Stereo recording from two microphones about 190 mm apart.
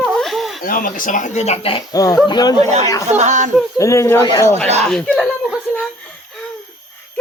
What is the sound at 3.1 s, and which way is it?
Speech, 40° right (ahead or behind).